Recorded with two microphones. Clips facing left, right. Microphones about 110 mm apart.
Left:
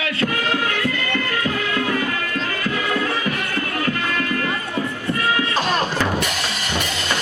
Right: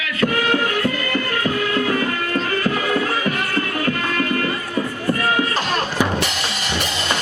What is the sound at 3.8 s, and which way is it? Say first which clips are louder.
Music: right 2 dB; 45° right (ahead or behind).